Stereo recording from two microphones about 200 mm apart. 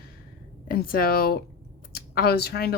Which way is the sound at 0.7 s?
45° left (ahead or behind).